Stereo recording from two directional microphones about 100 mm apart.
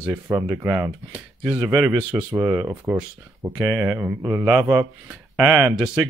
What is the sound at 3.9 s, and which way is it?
Speech, 20° right (ahead or behind).